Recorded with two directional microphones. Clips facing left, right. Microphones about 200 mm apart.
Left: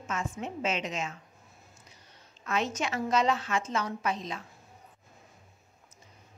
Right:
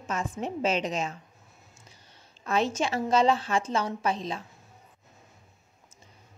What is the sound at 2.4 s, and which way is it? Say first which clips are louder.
A woman's voice: right 4 dB; 30° right (ahead or behind).